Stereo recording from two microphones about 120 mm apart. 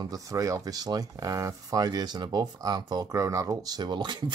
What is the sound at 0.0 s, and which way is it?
Speech, 30° right (ahead or behind).